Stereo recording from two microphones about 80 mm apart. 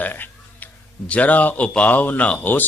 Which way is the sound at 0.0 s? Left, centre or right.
Left.